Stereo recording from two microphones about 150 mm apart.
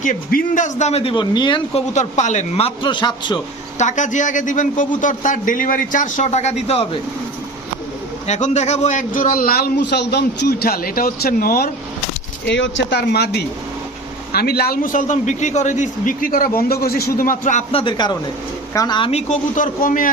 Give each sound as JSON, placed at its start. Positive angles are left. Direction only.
{"t": 0.0, "sound": "a man's voice", "side_deg": 65}
{"t": 1.9, "sound": "a man's voice", "side_deg": 55}
{"t": 3.8, "sound": "a man's voice", "side_deg": 55}
{"t": 8.3, "sound": "a man's voice", "side_deg": 50}
{"t": 12.9, "sound": "a man's voice", "side_deg": 90}
{"t": 17.7, "sound": "a man's voice", "side_deg": 35}
{"t": 19.3, "sound": "a man's voice", "side_deg": 60}